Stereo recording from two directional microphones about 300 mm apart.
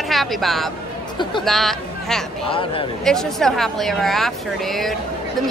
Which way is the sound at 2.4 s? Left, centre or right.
Centre.